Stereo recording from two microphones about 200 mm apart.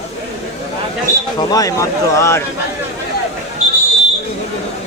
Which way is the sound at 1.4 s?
20° left (ahead or behind).